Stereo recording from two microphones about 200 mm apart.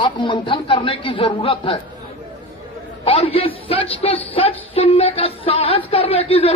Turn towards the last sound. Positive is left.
turn(degrees=30)  # may be behind; listen again after turning